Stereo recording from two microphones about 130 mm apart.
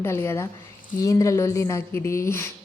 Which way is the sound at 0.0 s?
20° left (ahead or behind).